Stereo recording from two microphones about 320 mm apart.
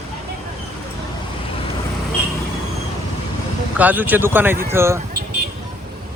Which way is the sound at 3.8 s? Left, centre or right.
Centre.